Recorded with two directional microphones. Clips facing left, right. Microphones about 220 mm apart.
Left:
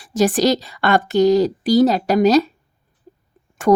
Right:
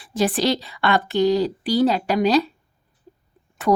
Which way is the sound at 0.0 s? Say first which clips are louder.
Left 5 dB; 45° left (ahead or behind).